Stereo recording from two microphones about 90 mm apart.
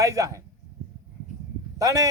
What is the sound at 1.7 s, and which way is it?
Speech, 40° right (ahead or behind).